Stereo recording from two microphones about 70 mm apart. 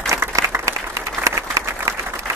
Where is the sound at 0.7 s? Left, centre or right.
Right.